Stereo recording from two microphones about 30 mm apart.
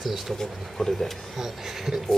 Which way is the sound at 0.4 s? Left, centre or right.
Centre.